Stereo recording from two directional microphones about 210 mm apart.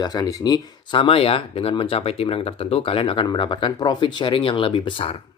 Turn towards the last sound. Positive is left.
turn(degrees=25)  # may be behind; listen again after turning